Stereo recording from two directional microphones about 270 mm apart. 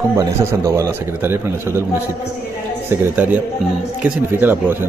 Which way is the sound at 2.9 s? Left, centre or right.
Centre.